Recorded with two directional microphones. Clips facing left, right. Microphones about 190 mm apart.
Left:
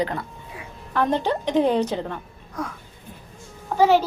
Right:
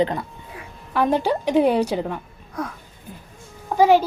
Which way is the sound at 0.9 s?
10° right (ahead or behind).